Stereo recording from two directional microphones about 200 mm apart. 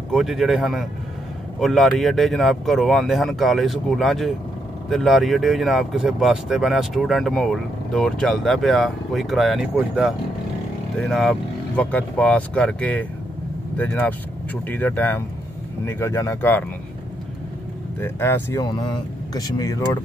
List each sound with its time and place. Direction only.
0.1 s speech: centre (ahead or behind)
18.0 s speech: 10° left (ahead or behind)